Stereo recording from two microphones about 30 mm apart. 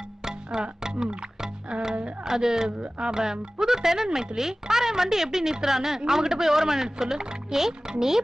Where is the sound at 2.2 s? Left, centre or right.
Centre.